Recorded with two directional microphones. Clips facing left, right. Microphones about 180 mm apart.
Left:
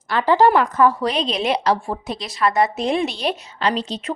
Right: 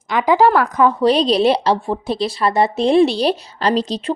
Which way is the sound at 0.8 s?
20° right (ahead or behind).